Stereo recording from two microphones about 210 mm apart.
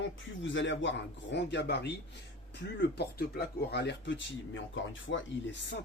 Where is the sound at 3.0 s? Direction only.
50° left (ahead or behind).